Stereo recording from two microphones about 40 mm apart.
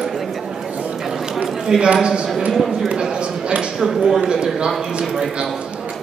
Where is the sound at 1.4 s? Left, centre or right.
Centre.